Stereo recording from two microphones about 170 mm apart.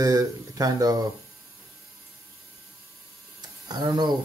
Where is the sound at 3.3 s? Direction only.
25° right (ahead or behind).